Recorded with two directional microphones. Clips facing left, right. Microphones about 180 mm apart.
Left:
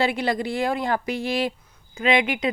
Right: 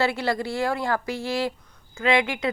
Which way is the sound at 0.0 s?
15° left (ahead or behind).